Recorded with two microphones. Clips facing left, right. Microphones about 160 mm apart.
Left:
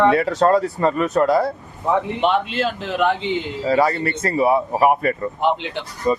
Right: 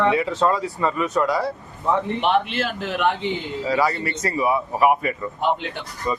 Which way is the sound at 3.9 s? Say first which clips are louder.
Left 4 dB; 55° left (ahead or behind).